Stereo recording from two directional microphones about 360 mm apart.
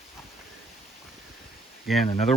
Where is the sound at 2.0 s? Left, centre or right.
Centre.